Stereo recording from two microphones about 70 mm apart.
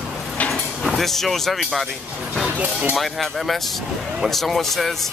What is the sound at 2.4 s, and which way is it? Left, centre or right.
Speech, right.